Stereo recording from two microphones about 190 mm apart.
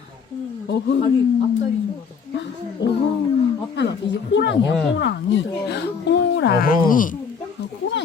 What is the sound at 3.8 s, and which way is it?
Speech, 65° left (ahead or behind).